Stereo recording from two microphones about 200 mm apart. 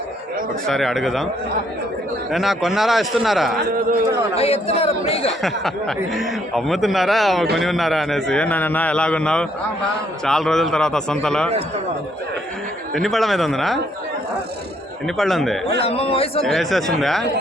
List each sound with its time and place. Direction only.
0.7 s a man's voice: centre (ahead or behind)
2.3 s a man's voice: centre (ahead or behind)
4.4 s speech: 30° left (ahead or behind)
5.4 s a man's voice: centre (ahead or behind)
12.9 s a man's voice: centre (ahead or behind)
15.0 s a man's voice: centre (ahead or behind)
15.8 s a man's voice: 30° left (ahead or behind)
16.5 s a man's voice: centre (ahead or behind)